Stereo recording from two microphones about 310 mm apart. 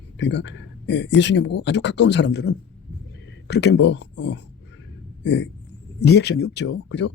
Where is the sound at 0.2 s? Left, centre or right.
Left.